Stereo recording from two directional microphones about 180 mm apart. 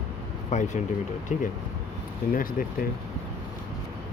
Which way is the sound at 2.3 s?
50° left (ahead or behind).